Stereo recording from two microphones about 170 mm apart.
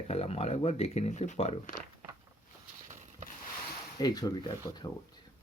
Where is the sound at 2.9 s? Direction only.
45° right (ahead or behind).